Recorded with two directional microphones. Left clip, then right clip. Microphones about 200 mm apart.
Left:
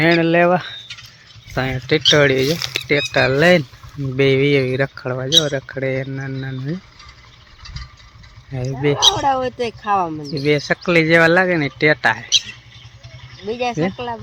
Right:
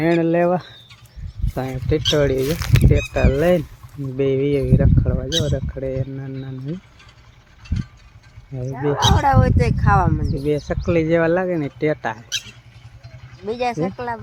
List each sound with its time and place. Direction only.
0.0 s speech: centre (ahead or behind)
9.1 s speech: 30° left (ahead or behind)
10.3 s speech: 5° left (ahead or behind)
13.4 s speech: 15° left (ahead or behind)
13.8 s speech: 30° left (ahead or behind)